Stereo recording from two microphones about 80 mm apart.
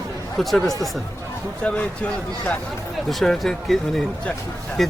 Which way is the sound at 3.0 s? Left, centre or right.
Centre.